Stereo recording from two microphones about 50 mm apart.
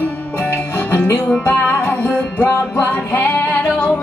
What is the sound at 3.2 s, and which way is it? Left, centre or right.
Female singing, left.